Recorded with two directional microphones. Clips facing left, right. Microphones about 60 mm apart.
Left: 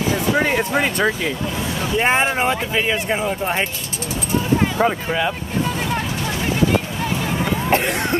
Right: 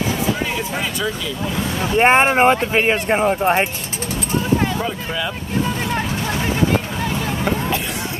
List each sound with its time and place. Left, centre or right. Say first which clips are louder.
0.4 s music: left 5 dB; left
2.0 s speech: right 5 dB; right
4.7 s speech: left 5 dB; left